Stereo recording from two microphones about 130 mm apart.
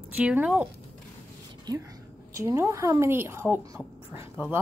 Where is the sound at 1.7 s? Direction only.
30° right (ahead or behind); by 4.2 s 15° right (ahead or behind).